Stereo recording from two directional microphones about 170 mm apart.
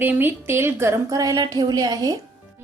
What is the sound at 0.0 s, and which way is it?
A woman's voice, 10° right (ahead or behind).